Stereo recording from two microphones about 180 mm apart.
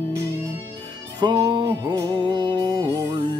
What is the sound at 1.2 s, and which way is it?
Music, 25° right (ahead or behind).